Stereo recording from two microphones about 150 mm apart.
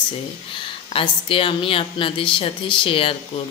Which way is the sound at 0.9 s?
35° left (ahead or behind).